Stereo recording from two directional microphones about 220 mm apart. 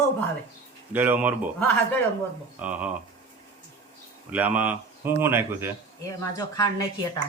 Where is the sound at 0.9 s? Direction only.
10° right (ahead or behind).